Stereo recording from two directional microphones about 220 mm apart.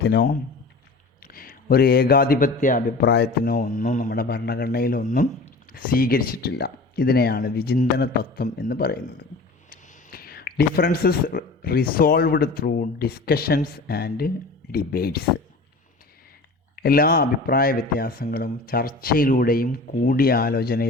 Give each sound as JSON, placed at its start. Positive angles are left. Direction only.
{"t": 0.0, "sound": "a man's voice", "side_deg": 50}
{"t": 16.8, "sound": "a man's voice", "side_deg": 45}